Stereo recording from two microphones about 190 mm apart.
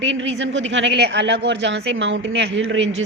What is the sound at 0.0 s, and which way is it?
A woman's voice, 75° right (ahead or behind).